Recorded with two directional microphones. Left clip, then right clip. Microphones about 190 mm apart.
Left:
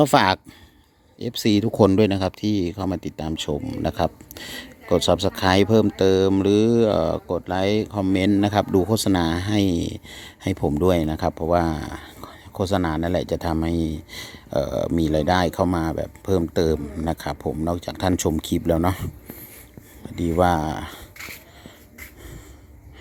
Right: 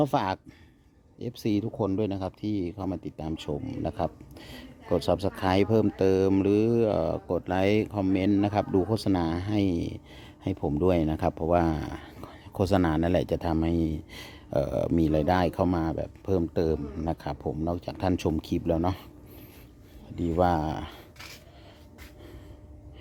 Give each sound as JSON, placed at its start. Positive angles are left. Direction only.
{"t": 0.0, "sound": "speech", "side_deg": 15}
{"t": 1.7, "sound": "speech", "side_deg": 25}
{"t": 20.1, "sound": "speech", "side_deg": 5}